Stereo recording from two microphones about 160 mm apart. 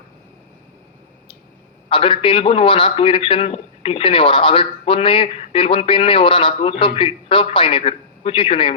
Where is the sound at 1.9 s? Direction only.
35° left (ahead or behind).